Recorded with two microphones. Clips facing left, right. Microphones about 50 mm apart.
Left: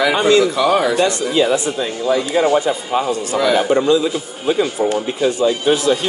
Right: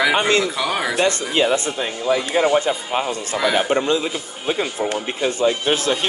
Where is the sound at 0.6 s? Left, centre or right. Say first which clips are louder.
Left 7 dB; centre.